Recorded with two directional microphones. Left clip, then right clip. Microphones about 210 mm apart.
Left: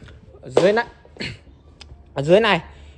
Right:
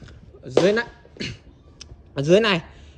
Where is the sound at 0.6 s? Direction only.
25° right (ahead or behind).